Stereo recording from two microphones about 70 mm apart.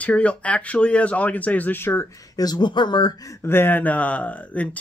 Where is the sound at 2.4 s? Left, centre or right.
Left.